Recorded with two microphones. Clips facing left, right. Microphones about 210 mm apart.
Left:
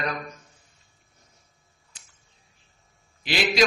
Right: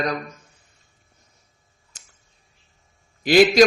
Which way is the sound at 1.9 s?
45° right (ahead or behind).